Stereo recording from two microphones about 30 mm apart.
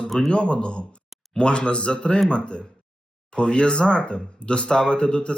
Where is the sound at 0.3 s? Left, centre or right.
Left.